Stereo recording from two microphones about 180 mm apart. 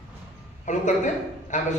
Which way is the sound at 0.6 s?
40° left (ahead or behind).